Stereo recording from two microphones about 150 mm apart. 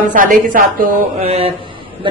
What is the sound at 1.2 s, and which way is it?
Speech, 45° right (ahead or behind).